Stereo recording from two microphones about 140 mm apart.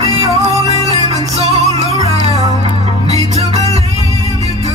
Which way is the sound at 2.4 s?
50° right (ahead or behind).